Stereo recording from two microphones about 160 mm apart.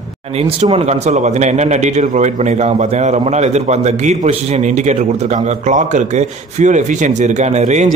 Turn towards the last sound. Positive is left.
turn(degrees=-45)  # may be behind; listen again after turning